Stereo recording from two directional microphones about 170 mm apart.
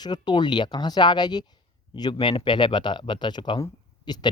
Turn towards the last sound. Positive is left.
turn(degrees=25)  # may be behind; listen again after turning